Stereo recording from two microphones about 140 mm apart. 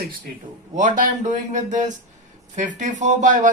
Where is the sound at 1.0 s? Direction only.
65° right (ahead or behind).